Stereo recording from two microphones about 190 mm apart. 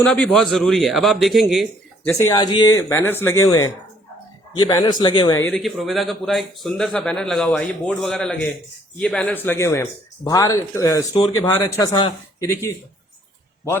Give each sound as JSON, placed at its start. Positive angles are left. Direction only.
{"t": 0.0, "sound": "a man's voice", "side_deg": 5}
{"t": 2.3, "sound": "a man's voice", "side_deg": 20}
{"t": 5.5, "sound": "a man's voice", "side_deg": 0}